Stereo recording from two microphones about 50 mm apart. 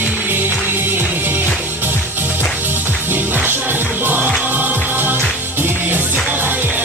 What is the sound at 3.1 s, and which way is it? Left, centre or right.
Music, right.